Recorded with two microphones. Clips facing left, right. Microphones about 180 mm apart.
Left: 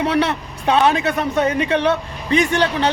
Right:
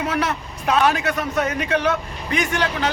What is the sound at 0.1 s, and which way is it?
A man's voice, 30° left (ahead or behind).